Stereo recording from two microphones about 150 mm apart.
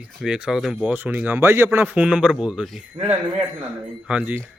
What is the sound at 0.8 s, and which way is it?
A man's voice, 10° right (ahead or behind).